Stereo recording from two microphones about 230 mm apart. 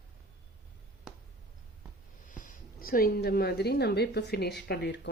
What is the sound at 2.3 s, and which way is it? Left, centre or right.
Speech, left.